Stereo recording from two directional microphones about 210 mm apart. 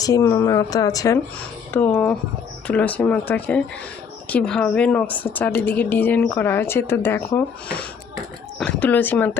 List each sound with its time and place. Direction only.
0.0 s a woman's voice: 15° left (ahead or behind)